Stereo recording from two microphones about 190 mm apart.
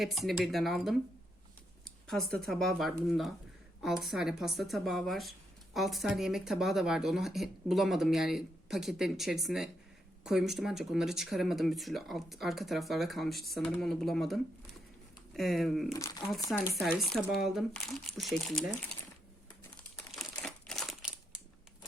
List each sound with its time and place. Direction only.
0.0 s speech: centre (ahead or behind)
1.8 s a sound: centre (ahead or behind)
2.5 s speech: centre (ahead or behind)
15.9 s speech: 15° left (ahead or behind)
16.5 s speech: centre (ahead or behind)
20.1 s crumpling: centre (ahead or behind)